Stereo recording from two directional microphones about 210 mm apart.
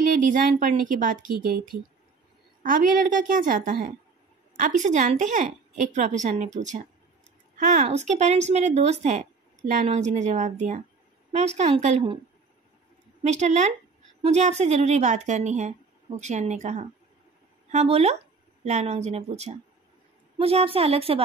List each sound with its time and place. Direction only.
0.2 s a woman's voice: 40° right (ahead or behind)
13.2 s a woman's voice: 35° right (ahead or behind)